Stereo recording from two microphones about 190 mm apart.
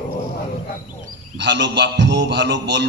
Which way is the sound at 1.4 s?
65° right (ahead or behind).